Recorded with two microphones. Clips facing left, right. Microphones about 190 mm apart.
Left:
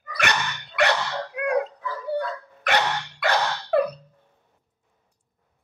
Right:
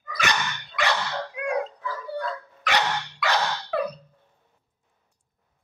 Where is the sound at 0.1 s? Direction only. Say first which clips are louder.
Left 1 dB; 65° left (ahead or behind).